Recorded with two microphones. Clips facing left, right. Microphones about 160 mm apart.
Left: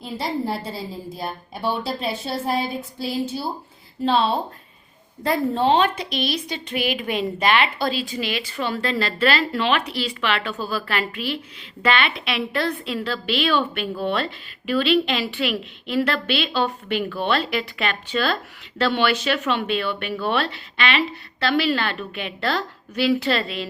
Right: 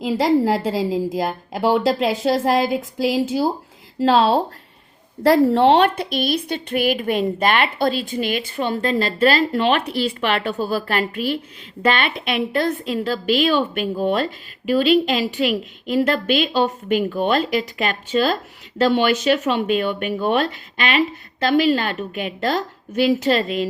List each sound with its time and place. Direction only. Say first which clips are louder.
0.0 s a woman's voice: right 9 dB; 90° right; by 23.6 s 40° right (ahead or behind)